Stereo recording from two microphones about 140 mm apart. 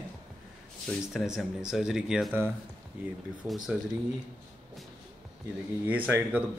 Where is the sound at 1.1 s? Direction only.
Centre (ahead or behind).